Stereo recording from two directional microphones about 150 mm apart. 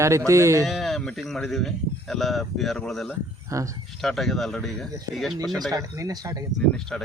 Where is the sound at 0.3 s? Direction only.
20° right (ahead or behind).